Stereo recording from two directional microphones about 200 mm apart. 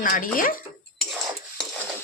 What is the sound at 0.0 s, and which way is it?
Speech, 45° left (ahead or behind).